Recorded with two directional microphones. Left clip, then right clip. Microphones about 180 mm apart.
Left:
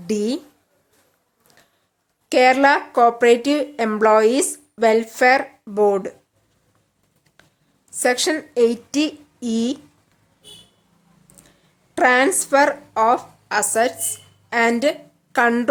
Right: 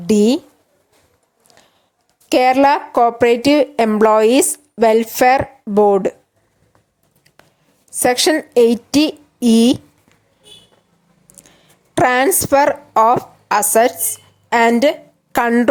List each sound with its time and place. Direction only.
0.1 s speech: 30° right (ahead or behind)
1.5 s a sound: 25° right (ahead or behind)
2.3 s speech: 30° right (ahead or behind)
7.9 s a woman's voice: 35° right (ahead or behind)
11.3 s a woman's voice: 30° right (ahead or behind)